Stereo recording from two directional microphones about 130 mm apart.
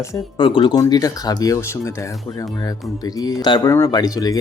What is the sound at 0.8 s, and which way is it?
Speech, 30° left (ahead or behind).